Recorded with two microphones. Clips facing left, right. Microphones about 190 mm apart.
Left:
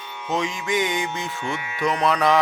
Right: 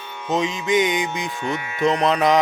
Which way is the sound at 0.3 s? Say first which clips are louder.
Right 4 dB; 20° right (ahead or behind).